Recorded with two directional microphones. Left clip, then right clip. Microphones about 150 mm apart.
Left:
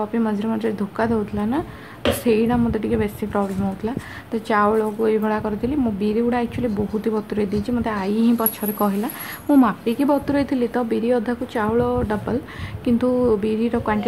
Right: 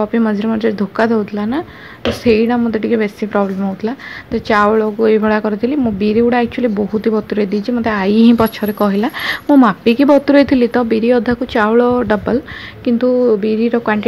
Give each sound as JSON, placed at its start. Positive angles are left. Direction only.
{"t": 0.0, "sound": "speech", "side_deg": -25}
{"t": 9.6, "sound": "a woman's voice", "side_deg": -30}
{"t": 12.8, "sound": "a woman's voice", "side_deg": -10}